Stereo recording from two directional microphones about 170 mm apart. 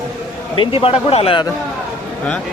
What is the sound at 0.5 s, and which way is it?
Speech, 30° left (ahead or behind).